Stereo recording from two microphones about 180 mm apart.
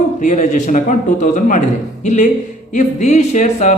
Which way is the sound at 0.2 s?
40° left (ahead or behind).